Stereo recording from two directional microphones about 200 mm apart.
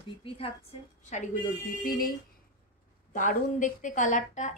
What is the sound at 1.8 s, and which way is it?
Speech, 45° left (ahead or behind).